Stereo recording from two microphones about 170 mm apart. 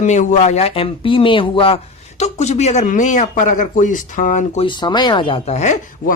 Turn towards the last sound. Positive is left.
turn(degrees=45)  # may be behind; listen again after turning